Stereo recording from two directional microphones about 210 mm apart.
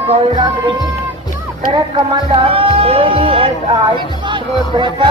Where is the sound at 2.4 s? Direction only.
25° right (ahead or behind).